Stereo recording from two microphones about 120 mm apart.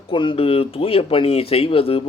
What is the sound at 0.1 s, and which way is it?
Speech, 45° left (ahead or behind).